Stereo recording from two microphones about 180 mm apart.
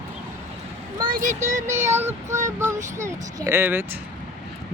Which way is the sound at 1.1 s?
45° right (ahead or behind).